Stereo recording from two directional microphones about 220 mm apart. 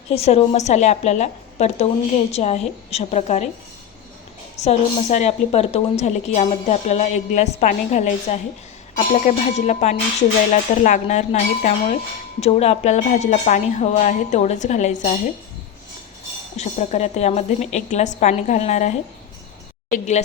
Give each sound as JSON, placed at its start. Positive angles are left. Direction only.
{"t": 0.1, "sound": "a woman's voice", "side_deg": 30}
{"t": 4.6, "sound": "a woman's voice", "side_deg": 30}
{"t": 16.6, "sound": "a woman's voice", "side_deg": 30}